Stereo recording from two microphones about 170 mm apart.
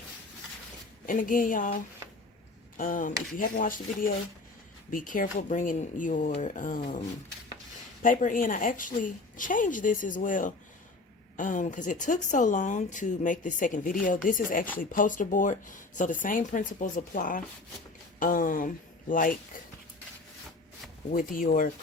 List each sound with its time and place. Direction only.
1.0 s speech: 50° left (ahead or behind)
2.7 s speech: 50° left (ahead or behind)
8.0 s speech: 50° left (ahead or behind)
21.1 s speech: 50° left (ahead or behind)